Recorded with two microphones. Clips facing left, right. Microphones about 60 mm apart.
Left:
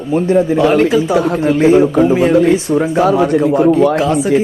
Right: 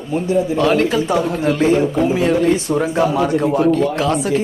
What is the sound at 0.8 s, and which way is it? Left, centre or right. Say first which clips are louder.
Speech: left 4 dB; centre.